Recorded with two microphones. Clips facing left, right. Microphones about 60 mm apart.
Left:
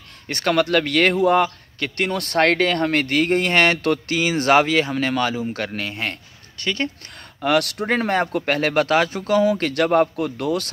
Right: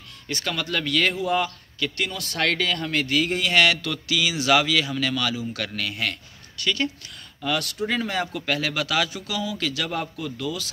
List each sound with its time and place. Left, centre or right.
0.3 s a man's voice: left
7.4 s a man's voice: left